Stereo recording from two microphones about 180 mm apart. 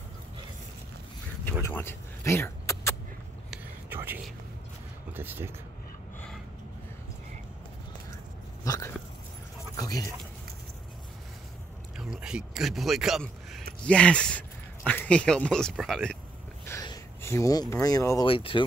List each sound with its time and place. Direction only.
1.4 s vehicle: 10° left (ahead or behind)
3.4 s vehicle: 10° right (ahead or behind)
5.1 s speech: 10° right (ahead or behind)
8.6 s a sound: 20° left (ahead or behind)
12.0 s speech: 5° right (ahead or behind)
16.6 s a sound: 20° left (ahead or behind)
18.2 s speech: 30° left (ahead or behind)